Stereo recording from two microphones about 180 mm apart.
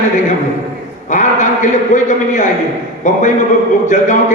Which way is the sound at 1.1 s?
45° left (ahead or behind).